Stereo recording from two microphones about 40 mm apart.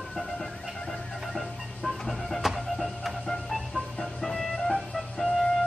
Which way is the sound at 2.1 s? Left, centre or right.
Centre.